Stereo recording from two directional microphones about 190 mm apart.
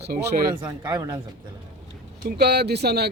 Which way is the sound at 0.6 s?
20° right (ahead or behind).